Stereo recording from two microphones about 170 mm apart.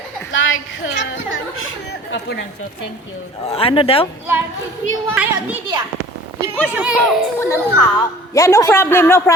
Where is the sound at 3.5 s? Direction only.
35° left (ahead or behind).